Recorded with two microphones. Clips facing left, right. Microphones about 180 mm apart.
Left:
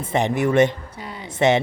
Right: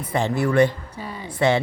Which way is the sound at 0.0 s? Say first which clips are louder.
Left 2 dB; 20° left (ahead or behind).